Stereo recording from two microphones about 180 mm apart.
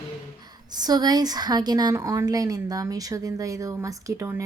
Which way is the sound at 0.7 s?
20° right (ahead or behind).